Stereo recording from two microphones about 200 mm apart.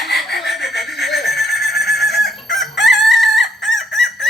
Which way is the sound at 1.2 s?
55° left (ahead or behind).